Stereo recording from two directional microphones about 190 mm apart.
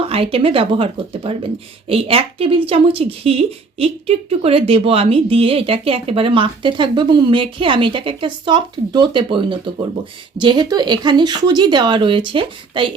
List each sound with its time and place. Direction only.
0.0 s a woman's voice: 30° right (ahead or behind)